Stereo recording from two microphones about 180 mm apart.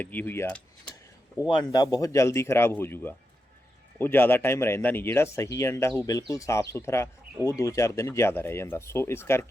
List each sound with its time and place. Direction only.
0.0 s speech: 10° left (ahead or behind)
1.4 s speech: 25° left (ahead or behind)